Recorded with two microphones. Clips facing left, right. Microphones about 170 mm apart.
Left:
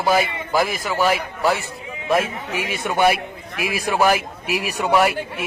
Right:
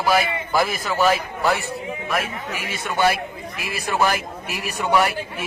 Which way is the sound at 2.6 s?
15° left (ahead or behind).